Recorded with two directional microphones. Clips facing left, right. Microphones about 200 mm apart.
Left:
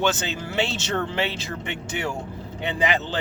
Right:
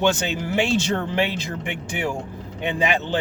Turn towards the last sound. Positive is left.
turn(degrees=-15)  # may be behind; listen again after turning